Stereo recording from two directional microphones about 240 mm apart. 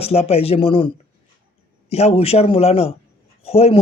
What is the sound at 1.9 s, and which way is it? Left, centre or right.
A man's voice, left.